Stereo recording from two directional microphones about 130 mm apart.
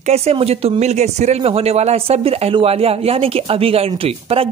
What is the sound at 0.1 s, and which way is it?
Speech, 50° right (ahead or behind).